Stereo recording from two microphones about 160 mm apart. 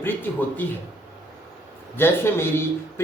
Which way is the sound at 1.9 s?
15° left (ahead or behind).